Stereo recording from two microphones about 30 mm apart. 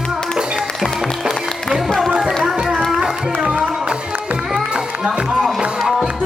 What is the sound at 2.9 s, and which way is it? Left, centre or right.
Run, right.